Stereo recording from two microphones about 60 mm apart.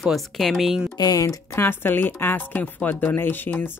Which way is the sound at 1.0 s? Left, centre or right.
Left.